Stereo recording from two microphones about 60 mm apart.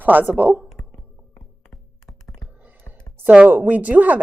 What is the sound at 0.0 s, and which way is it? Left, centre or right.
Speech, right.